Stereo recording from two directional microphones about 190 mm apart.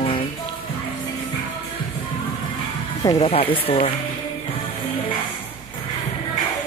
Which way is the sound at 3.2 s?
30° left (ahead or behind).